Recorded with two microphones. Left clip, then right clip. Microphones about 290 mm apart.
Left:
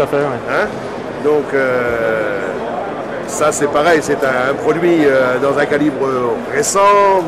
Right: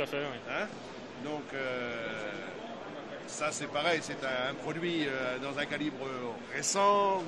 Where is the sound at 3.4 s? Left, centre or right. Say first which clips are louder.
Left 19 dB; right.